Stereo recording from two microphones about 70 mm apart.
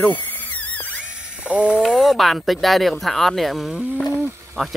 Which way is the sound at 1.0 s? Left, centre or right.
Centre.